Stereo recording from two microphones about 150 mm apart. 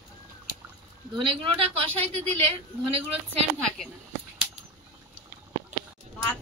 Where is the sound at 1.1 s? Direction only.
35° right (ahead or behind).